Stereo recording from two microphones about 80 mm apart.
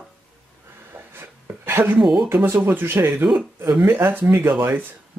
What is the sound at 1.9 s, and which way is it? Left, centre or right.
Speech, centre.